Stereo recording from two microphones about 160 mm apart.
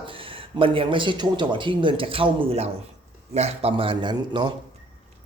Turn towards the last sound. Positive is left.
turn(degrees=-30)  # may be behind; listen again after turning